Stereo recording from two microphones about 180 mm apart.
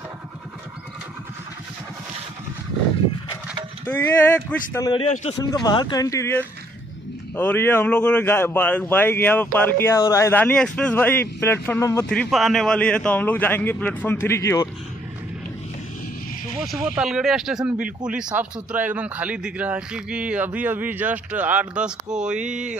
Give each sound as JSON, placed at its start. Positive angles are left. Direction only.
{"t": 3.8, "sound": "speech", "side_deg": 10}
{"t": 12.1, "sound": "speech", "side_deg": 0}
{"t": 16.8, "sound": "a man's voice", "side_deg": -5}